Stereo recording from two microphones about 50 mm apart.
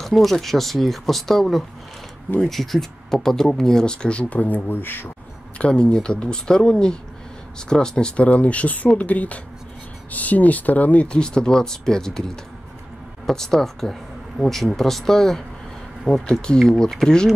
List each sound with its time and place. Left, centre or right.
0.0 s speech: centre; by 5.1 s left
5.6 s speech: centre